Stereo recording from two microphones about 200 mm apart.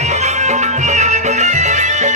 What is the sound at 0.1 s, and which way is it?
Music, 35° right (ahead or behind).